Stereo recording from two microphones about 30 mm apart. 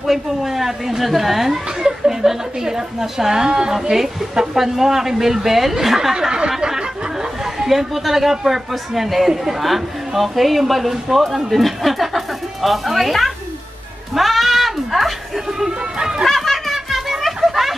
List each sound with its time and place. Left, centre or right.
0.0 s a woman's voice: centre
1.8 s a woman's voice: centre
3.9 s a woman's voice: centre
7.5 s a woman's voice: centre
14.1 s goat: centre
15.6 s speech: centre
16.3 s a sound: centre
17.4 s a sound: centre